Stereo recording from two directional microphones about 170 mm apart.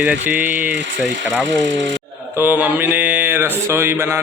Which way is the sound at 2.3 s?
10° right (ahead or behind).